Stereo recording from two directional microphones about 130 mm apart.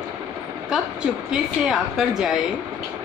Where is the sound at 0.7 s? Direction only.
5° right (ahead or behind).